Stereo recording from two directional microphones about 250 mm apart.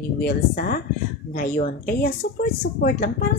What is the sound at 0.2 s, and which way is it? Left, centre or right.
Speech, left.